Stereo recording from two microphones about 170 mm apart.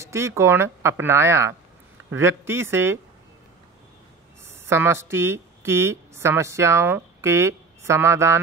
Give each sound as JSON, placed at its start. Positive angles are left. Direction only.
{"t": 0.0, "sound": "speech", "side_deg": -15}
{"t": 4.5, "sound": "a woman's voice", "side_deg": -15}